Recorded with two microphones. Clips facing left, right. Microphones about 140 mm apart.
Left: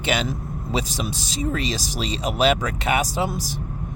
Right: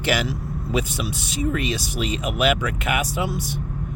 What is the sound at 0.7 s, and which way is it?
Speech, 35° left (ahead or behind).